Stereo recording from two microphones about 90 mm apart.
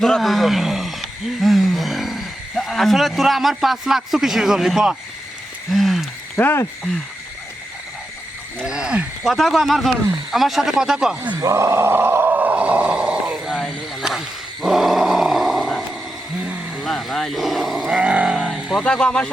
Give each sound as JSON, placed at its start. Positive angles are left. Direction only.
{"t": 0.0, "sound": "a sound", "side_deg": 0}
{"t": 6.3, "sound": "speech", "side_deg": 25}
{"t": 8.6, "sound": "speech", "side_deg": -10}
{"t": 11.3, "sound": "a sound", "side_deg": -30}
{"t": 14.0, "sound": "dog", "side_deg": -5}
{"t": 16.4, "sound": "vehicle", "side_deg": -15}
{"t": 16.8, "sound": "sheep", "side_deg": 0}
{"t": 18.3, "sound": "vehicle", "side_deg": 0}
{"t": 18.8, "sound": "speech", "side_deg": 10}